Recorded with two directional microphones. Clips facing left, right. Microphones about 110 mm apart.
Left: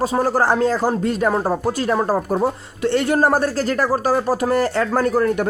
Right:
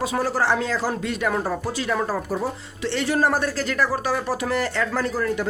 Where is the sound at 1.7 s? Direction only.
45° left (ahead or behind).